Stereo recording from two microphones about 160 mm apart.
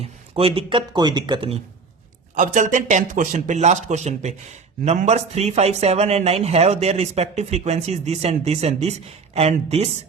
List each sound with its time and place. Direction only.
0.0 s speech: 35° right (ahead or behind)
2.3 s a man's voice: 50° right (ahead or behind)